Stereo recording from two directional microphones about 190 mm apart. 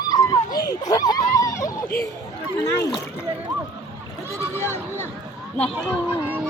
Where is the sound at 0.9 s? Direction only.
20° left (ahead or behind).